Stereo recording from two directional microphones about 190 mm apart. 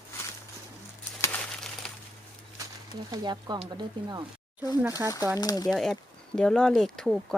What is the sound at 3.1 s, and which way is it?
Speech, 20° right (ahead or behind).